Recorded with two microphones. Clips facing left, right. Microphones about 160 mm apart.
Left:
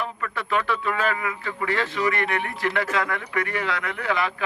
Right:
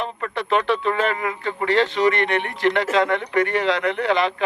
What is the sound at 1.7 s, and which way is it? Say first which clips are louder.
Speech: right 7 dB; 25° right (ahead or behind).